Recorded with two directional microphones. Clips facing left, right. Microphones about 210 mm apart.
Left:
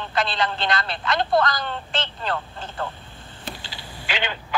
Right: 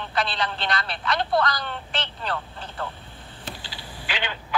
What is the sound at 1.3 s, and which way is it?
Speech, 45° left (ahead or behind).